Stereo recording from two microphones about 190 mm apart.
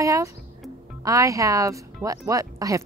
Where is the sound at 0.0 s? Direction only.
15° right (ahead or behind).